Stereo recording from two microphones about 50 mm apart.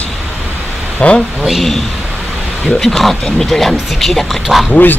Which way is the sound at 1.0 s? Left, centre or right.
Centre.